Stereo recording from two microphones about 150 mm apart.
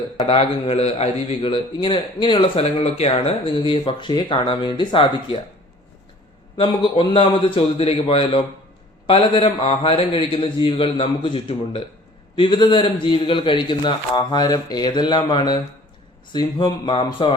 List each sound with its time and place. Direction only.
0.3 s a man's voice: 40° left (ahead or behind)
6.6 s a man's voice: 35° left (ahead or behind)